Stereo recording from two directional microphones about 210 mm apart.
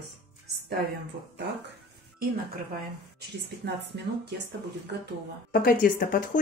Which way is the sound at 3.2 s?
50° right (ahead or behind).